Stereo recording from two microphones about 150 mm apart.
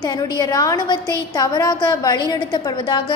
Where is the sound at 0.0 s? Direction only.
25° left (ahead or behind).